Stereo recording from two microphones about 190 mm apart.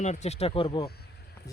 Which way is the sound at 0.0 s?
35° left (ahead or behind).